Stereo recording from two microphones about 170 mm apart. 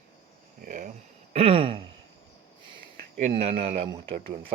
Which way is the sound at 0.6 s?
50° right (ahead or behind).